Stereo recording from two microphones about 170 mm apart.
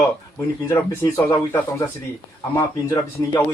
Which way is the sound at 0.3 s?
15° left (ahead or behind).